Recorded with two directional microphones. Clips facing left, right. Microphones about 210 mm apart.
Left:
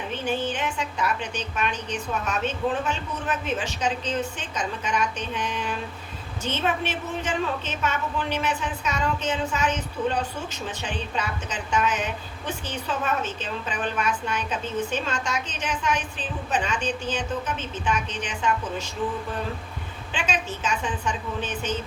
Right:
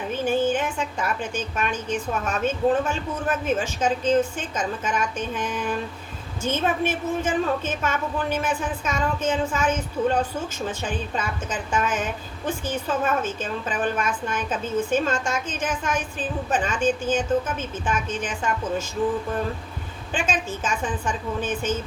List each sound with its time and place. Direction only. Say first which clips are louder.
0.1 s a woman's voice: right 6 dB; 50° right (ahead or behind)
20.1 s a woman's voice: right 3 dB; 50° right (ahead or behind)